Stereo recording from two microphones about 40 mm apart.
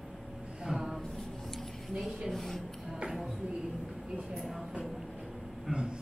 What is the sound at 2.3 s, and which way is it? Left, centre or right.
Speech, centre.